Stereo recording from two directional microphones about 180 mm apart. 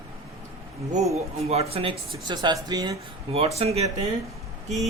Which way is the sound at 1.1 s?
35° right (ahead or behind).